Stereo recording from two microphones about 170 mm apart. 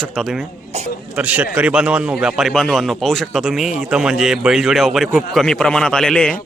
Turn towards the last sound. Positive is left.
turn(degrees=5)  # may be behind; listen again after turning